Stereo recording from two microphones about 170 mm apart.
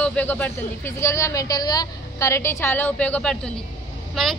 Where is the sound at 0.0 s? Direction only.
10° left (ahead or behind).